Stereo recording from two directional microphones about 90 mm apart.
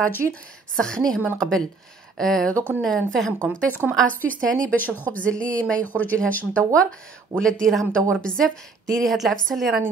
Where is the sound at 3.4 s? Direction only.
15° left (ahead or behind).